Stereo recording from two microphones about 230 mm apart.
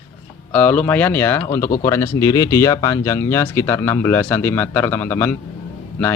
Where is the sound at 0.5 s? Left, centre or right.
Centre.